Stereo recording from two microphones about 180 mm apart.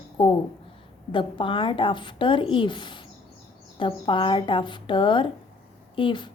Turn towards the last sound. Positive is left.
turn(degrees=25)  # may be behind; listen again after turning